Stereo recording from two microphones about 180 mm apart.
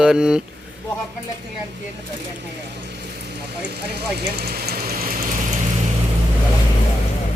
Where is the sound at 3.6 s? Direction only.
65° right (ahead or behind); by 5.6 s 45° right (ahead or behind).